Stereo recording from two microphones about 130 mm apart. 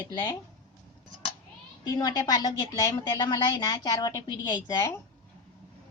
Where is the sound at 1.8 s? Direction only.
30° left (ahead or behind).